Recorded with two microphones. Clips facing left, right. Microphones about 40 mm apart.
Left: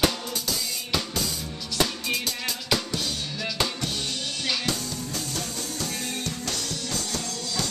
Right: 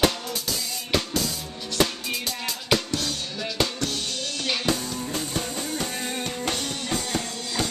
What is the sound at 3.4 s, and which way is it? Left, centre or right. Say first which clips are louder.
Music: right 2 dB; centre.